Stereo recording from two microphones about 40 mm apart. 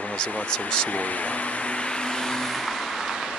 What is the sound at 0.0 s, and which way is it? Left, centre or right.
Vehicle, left.